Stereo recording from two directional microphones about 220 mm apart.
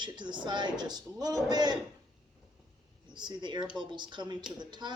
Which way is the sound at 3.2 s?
20° right (ahead or behind).